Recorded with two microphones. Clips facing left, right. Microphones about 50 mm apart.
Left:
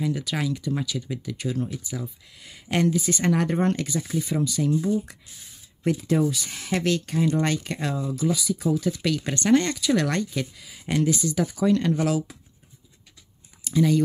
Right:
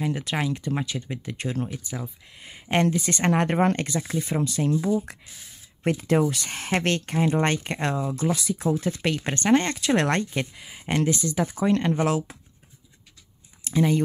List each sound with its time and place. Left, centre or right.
0.0 s speech: right
1.7 s speech: right
3.0 s speech: right
4.7 s speech: right
5.9 s speech: right
8.5 s speech: right
9.8 s speech: right
13.7 s speech: right